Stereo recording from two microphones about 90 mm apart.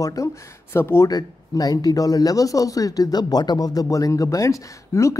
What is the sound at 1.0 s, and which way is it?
Speech, 40° left (ahead or behind).